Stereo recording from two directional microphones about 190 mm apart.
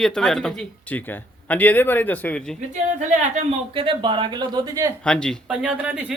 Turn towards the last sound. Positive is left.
turn(degrees=-5)  # may be behind; listen again after turning